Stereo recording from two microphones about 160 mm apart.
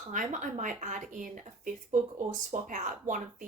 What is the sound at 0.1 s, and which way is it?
Speech, 55° right (ahead or behind).